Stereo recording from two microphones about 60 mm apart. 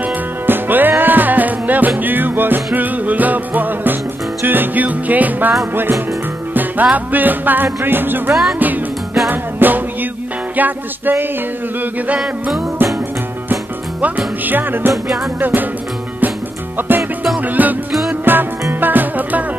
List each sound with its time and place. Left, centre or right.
0.5 s music: right
6.5 s music: right
14.0 s music: right
16.7 s music: right